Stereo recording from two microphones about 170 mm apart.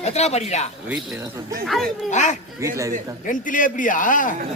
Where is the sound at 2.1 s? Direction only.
45° left (ahead or behind).